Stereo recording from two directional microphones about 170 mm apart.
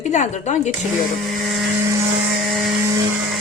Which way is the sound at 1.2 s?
Centre (ahead or behind).